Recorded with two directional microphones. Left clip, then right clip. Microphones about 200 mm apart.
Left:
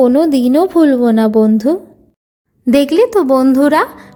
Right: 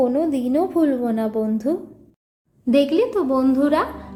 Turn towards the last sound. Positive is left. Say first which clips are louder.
# left 8 dB
turn(degrees=55)  # may be behind; listen again after turning